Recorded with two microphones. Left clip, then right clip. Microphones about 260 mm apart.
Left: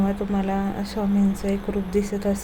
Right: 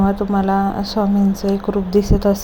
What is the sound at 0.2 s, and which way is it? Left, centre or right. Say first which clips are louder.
A woman's voice: right 9 dB; centre.